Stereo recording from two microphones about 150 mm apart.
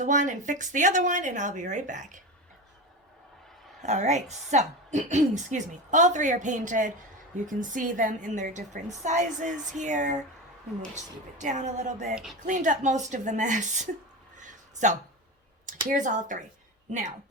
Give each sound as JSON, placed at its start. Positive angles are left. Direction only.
{"t": 0.0, "sound": "a woman's voice", "side_deg": -55}
{"t": 3.8, "sound": "a woman's voice", "side_deg": -50}
{"t": 12.1, "sound": "speech", "side_deg": -5}
{"t": 12.4, "sound": "a woman's voice", "side_deg": -55}
{"t": 14.3, "sound": "a sound", "side_deg": -55}
{"t": 15.6, "sound": "a woman's voice", "side_deg": -60}